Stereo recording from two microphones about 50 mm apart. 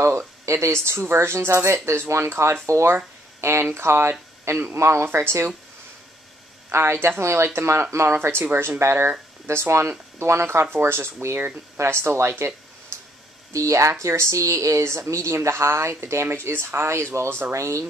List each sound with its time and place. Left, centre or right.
0.5 s a woman's voice: right
0.8 s speech: right
2.2 s speech: right
4.7 s a woman's voice: right
5.0 s speech: right
6.7 s speech: right
8.1 s speech: right
10.4 s speech: right
11.3 s speech: right
13.5 s a woman's voice: right
17.6 s speech: right